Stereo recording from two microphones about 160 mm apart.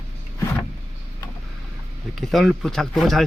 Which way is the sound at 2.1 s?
Centre (ahead or behind).